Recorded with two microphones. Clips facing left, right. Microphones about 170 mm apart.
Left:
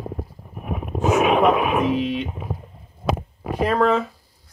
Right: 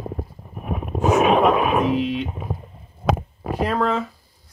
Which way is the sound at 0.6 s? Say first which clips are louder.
Right 1 dB; 40° right (ahead or behind).